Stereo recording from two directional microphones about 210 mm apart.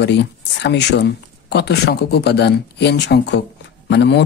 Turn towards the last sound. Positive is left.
turn(degrees=55)  # may be behind; listen again after turning